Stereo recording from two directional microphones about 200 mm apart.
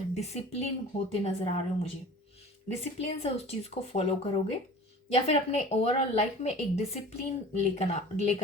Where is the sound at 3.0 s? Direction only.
30° left (ahead or behind).